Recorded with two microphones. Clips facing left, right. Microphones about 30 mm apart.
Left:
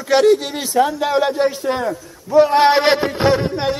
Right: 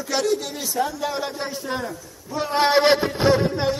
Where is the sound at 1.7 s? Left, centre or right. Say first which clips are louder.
Left 8 dB; left.